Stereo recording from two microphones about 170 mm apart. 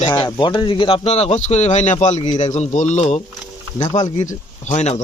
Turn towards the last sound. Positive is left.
turn(degrees=40)  # may be behind; listen again after turning